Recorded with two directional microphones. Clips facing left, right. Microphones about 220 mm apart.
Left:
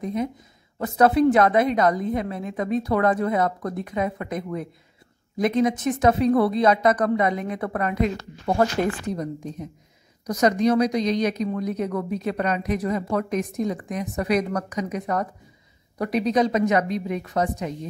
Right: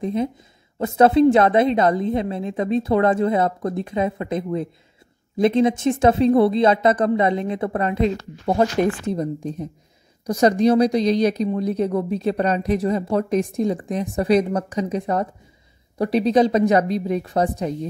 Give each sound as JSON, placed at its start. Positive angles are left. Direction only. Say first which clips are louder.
{"t": 0.0, "sound": "a woman's voice", "louder": "right 4 dB", "side_deg": -30}